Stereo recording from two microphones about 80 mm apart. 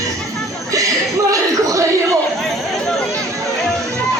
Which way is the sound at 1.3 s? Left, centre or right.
Right.